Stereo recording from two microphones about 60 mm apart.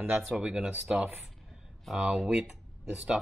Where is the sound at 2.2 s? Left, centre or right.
Centre.